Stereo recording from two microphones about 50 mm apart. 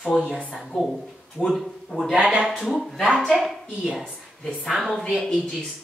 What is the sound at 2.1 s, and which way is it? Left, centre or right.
Speech, right.